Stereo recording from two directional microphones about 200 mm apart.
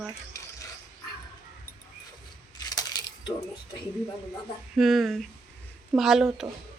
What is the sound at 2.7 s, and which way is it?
Crushing, 20° left (ahead or behind).